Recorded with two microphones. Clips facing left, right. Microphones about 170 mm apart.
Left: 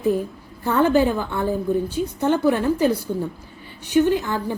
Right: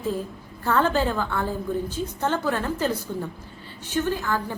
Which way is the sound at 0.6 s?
15° left (ahead or behind).